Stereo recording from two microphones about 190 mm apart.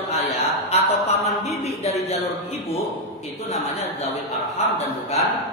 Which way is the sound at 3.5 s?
35° left (ahead or behind).